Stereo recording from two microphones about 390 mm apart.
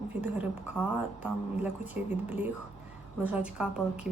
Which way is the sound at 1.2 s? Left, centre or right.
Centre.